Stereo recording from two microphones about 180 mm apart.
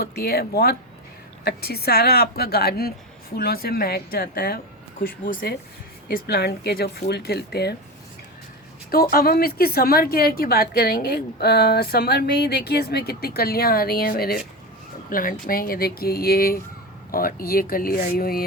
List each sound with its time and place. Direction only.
0.0 s a woman's voice: 60° left (ahead or behind)
8.9 s a woman's voice: 55° left (ahead or behind)